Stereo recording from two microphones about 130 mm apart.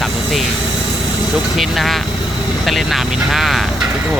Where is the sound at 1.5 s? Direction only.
Centre (ahead or behind).